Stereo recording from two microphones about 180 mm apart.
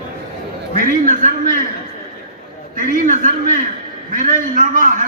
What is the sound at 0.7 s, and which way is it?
Speech, 45° right (ahead or behind).